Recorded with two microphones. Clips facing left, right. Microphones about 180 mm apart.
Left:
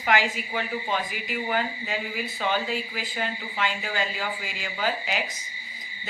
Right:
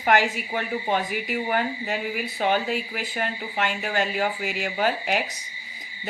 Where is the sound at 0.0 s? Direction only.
55° right (ahead or behind).